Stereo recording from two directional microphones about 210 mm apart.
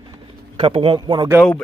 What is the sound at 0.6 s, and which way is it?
Speech, 25° right (ahead or behind).